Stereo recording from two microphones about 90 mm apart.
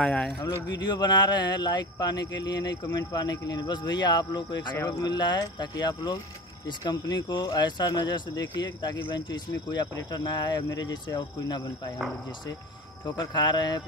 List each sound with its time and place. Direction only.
0.0 s speech: 5° left (ahead or behind)
0.7 s speech: 50° left (ahead or behind)
13.2 s speech: 55° left (ahead or behind)